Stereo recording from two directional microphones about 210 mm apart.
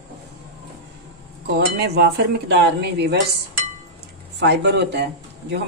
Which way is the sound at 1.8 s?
50° right (ahead or behind).